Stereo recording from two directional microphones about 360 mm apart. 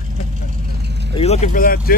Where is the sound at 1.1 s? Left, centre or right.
Centre.